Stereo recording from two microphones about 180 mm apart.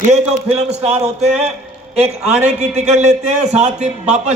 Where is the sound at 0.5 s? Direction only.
40° right (ahead or behind).